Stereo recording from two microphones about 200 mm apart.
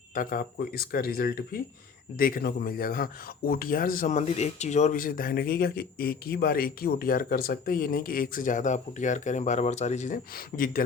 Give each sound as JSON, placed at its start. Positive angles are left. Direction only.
{"t": 0.1, "sound": "speech", "side_deg": 45}